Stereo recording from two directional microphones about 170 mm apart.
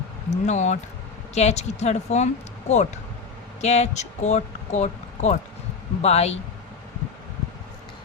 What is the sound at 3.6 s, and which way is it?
A woman's voice, 40° left (ahead or behind).